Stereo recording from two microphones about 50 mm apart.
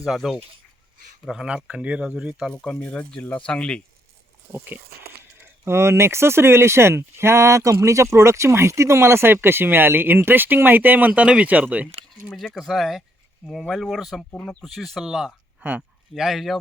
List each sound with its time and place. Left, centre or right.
0.0 s speech: centre
1.5 s speech: right
2.6 s speech: centre
3.2 s speech: left
4.5 s speech: right
5.6 s speech: right
12.5 s speech: centre
15.0 s speech: centre